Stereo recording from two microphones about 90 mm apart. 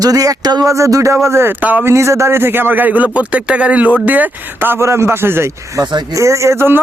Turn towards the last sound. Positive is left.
turn(degrees=-25)  # may be behind; listen again after turning